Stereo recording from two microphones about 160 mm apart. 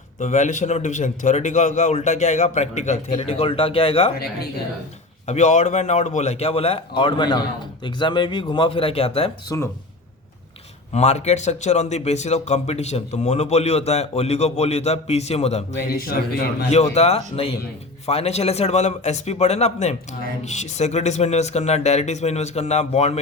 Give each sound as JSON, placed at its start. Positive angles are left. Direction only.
{"t": 0.2, "sound": "a man's voice", "side_deg": 50}
{"t": 5.2, "sound": "a man's voice", "side_deg": 45}
{"t": 9.5, "sound": "speech", "side_deg": 20}
{"t": 10.9, "sound": "a man's voice", "side_deg": 45}
{"t": 15.7, "sound": "speech", "side_deg": 65}
{"t": 16.9, "sound": "a man's voice", "side_deg": 40}